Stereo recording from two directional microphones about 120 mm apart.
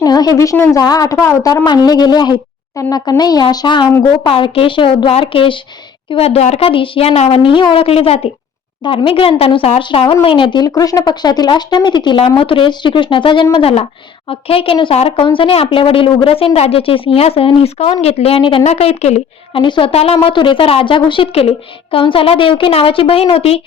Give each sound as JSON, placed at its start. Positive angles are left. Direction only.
{"t": 0.0, "sound": "a sound", "side_deg": 35}
{"t": 0.5, "sound": "a woman's voice", "side_deg": 25}
{"t": 6.1, "sound": "a woman's voice", "side_deg": 60}
{"t": 6.7, "sound": "a woman's voice", "side_deg": 45}
{"t": 8.8, "sound": "a woman's voice", "side_deg": 40}
{"t": 18.6, "sound": "a woman's voice", "side_deg": 65}
{"t": 19.6, "sound": "a woman's voice", "side_deg": 40}
{"t": 19.9, "sound": "a woman's voice", "side_deg": 60}
{"t": 20.2, "sound": "a woman's voice", "side_deg": 45}